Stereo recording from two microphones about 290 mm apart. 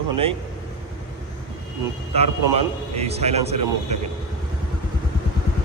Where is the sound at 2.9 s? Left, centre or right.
Right.